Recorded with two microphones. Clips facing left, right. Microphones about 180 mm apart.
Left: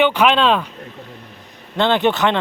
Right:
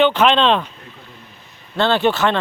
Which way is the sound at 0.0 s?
10° left (ahead or behind).